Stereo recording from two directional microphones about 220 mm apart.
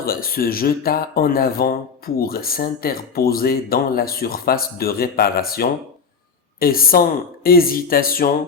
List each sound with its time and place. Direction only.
0.0 s speech: 40° left (ahead or behind)